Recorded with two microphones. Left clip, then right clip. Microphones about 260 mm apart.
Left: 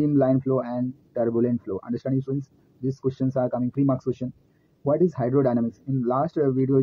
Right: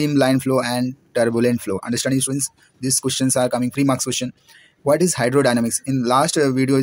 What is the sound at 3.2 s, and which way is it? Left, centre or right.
Speech, right.